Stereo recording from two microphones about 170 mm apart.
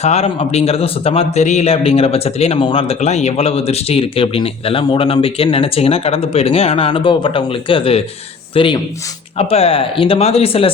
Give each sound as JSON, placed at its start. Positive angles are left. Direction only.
{"t": 0.0, "sound": "speech", "side_deg": 40}